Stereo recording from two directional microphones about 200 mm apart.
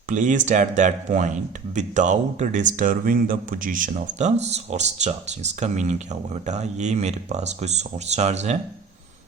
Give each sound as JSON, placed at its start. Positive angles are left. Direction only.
{"t": 0.1, "sound": "speech", "side_deg": -40}